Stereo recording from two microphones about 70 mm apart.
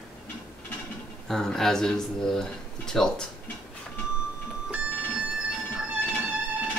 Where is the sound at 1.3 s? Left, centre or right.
Centre.